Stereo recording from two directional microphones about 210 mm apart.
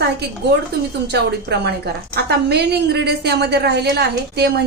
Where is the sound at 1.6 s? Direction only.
50° right (ahead or behind).